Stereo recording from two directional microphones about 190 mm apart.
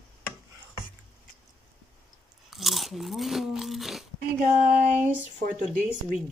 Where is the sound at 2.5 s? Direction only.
Centre (ahead or behind).